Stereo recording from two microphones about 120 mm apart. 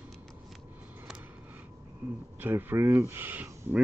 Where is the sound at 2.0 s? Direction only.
20° right (ahead or behind).